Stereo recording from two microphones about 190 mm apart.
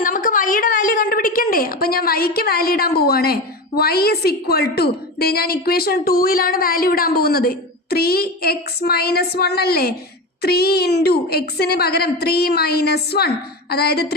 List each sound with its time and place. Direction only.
0.0 s a woman's voice: 45° left (ahead or behind)